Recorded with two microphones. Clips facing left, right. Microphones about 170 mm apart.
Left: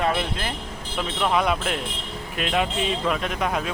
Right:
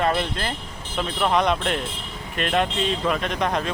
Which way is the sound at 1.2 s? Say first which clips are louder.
Right 1 dB; 5° left (ahead or behind).